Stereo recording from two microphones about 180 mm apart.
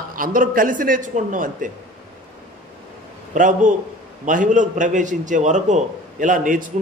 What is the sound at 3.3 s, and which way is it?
A man's voice, 45° right (ahead or behind).